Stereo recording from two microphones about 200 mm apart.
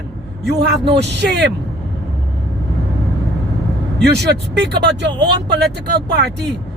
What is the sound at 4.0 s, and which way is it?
Speech, 55° right (ahead or behind).